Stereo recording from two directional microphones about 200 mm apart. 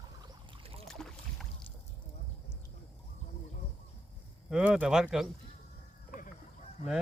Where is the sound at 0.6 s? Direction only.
30° right (ahead or behind).